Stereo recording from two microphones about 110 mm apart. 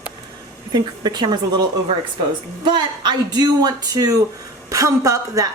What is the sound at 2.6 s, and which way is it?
A woman's voice, 45° right (ahead or behind).